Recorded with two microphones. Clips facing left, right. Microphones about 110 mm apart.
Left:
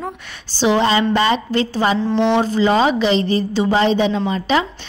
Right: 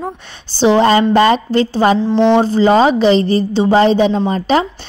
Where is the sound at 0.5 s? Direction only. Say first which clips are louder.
Right 5 dB; 35° right (ahead or behind).